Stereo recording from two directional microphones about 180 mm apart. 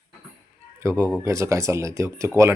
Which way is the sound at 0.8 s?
15° right (ahead or behind).